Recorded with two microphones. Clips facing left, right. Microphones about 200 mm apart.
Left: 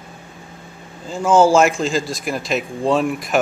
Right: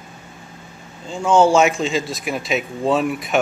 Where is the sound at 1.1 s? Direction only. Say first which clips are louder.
Left 1 dB; 5° left (ahead or behind).